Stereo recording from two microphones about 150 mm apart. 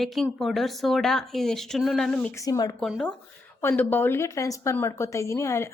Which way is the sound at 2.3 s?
20° left (ahead or behind).